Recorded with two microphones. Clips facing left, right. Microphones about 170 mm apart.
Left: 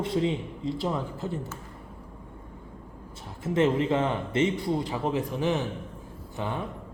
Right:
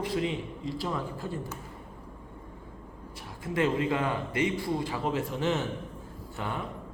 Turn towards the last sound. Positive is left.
turn(degrees=20)  # may be behind; listen again after turning